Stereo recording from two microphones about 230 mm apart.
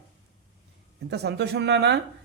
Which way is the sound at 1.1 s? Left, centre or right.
Right.